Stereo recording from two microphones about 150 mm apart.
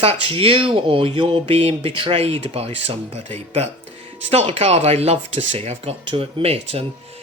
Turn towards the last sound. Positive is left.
turn(degrees=-40)  # may be behind; listen again after turning